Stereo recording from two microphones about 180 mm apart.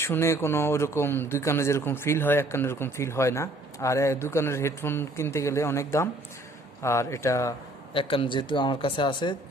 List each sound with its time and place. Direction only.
0.0 s speech: 15° left (ahead or behind)
7.9 s speech: 30° left (ahead or behind)